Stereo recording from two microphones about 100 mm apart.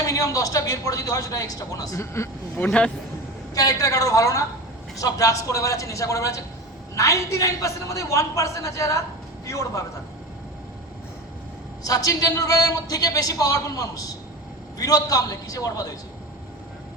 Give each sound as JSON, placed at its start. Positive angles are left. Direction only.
{"t": 0.0, "sound": "a man's voice", "side_deg": 35}
{"t": 2.6, "sound": "a man's voice", "side_deg": 10}
{"t": 3.5, "sound": "a man's voice", "side_deg": 35}
{"t": 11.8, "sound": "a man's voice", "side_deg": 40}